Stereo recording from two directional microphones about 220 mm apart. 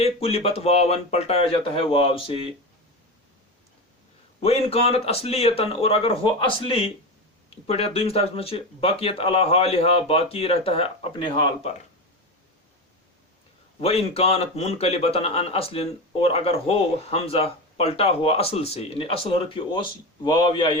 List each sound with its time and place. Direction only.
0.0 s a man's voice: 25° left (ahead or behind)
4.4 s a man's voice: 25° left (ahead or behind)
13.8 s a man's voice: 25° left (ahead or behind)